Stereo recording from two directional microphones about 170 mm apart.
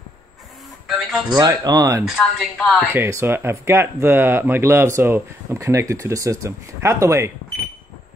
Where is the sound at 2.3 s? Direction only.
5° left (ahead or behind).